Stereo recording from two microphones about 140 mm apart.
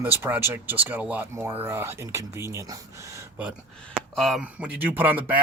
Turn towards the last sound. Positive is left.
turn(degrees=-10)  # may be behind; listen again after turning